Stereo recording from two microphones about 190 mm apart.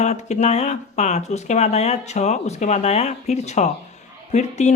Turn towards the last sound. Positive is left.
turn(degrees=40)  # may be behind; listen again after turning